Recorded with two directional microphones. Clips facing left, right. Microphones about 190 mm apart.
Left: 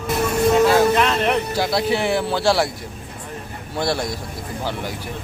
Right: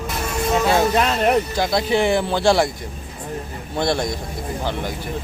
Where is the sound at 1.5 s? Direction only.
5° left (ahead or behind).